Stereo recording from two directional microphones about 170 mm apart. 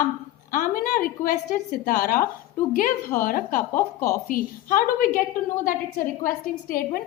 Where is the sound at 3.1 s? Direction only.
55° left (ahead or behind).